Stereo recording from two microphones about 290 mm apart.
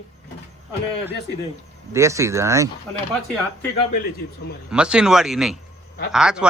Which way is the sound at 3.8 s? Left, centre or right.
Left.